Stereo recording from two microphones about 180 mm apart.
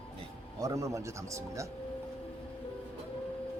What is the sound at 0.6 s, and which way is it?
Speech, 20° right (ahead or behind).